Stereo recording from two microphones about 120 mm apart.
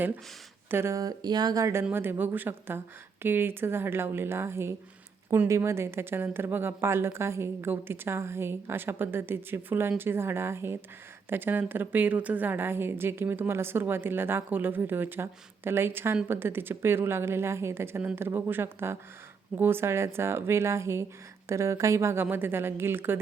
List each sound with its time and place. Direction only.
0.7 s a woman's voice: 20° right (ahead or behind)
1.8 s a woman's voice: 15° right (ahead or behind)